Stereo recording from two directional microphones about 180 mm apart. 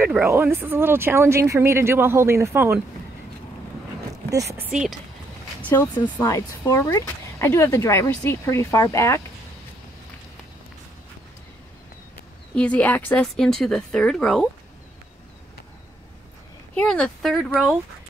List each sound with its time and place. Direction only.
0.0 s speech: 10° right (ahead or behind)
4.3 s speech: 15° right (ahead or behind)
4.6 s a woman's voice: 5° right (ahead or behind)
5.6 s speech: 10° left (ahead or behind)
12.5 s a woman's voice: 5° left (ahead or behind)
16.7 s a woman's voice: 5° left (ahead or behind)